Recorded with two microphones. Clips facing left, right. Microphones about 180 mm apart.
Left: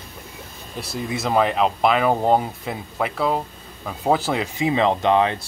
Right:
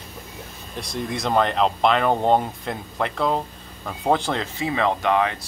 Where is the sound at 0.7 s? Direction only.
5° left (ahead or behind); by 5.3 s 25° left (ahead or behind).